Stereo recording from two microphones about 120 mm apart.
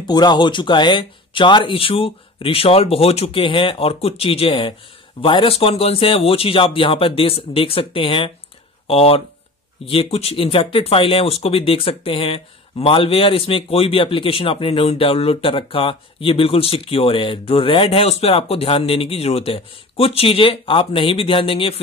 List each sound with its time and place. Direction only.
0.0 s speech: 35° left (ahead or behind)